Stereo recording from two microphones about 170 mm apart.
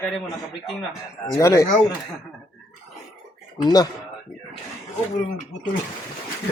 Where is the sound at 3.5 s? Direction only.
25° left (ahead or behind).